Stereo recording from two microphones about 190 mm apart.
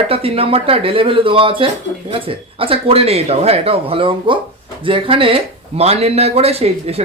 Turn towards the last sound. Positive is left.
turn(degrees=-30)  # may be behind; listen again after turning